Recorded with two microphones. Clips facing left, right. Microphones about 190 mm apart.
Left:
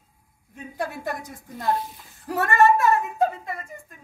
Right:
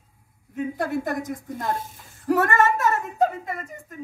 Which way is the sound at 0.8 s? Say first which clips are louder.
Right 2 dB; 45° right (ahead or behind).